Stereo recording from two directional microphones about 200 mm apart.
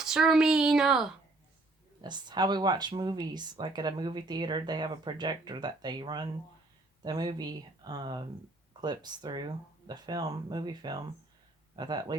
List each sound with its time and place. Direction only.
0.0 s a woman's voice: 5° right (ahead or behind)
2.0 s speech: 20° right (ahead or behind)